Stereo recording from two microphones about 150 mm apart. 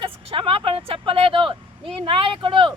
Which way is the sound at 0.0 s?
35° right (ahead or behind).